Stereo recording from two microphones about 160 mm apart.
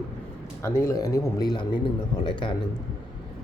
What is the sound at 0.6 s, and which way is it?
A man's voice, 20° left (ahead or behind).